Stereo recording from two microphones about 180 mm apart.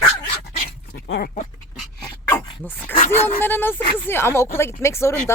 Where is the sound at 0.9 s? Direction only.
55° left (ahead or behind).